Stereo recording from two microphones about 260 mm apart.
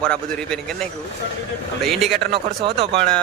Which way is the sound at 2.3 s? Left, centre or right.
Right.